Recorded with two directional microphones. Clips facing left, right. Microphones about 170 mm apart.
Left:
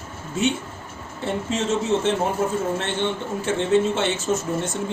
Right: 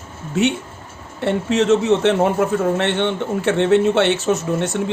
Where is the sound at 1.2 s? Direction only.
70° right (ahead or behind).